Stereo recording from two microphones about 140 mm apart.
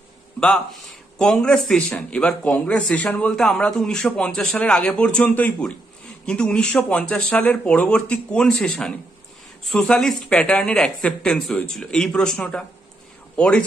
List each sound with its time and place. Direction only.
1.1 s a man's voice: 5° left (ahead or behind)